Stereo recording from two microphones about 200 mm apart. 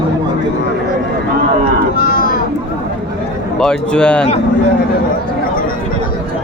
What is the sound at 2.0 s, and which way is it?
Livestock, 45° left (ahead or behind).